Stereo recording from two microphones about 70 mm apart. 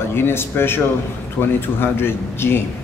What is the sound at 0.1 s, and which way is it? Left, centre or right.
Speech, left.